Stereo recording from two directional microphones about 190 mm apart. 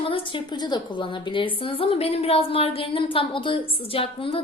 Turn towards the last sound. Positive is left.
turn(degrees=30)  # may be behind; listen again after turning